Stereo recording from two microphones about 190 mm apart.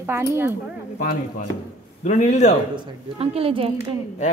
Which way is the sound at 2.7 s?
30° right (ahead or behind).